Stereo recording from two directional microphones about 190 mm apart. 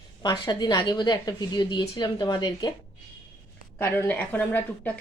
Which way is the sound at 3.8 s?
10° left (ahead or behind).